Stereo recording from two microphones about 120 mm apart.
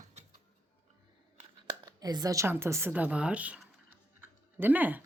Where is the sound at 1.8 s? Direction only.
30° right (ahead or behind).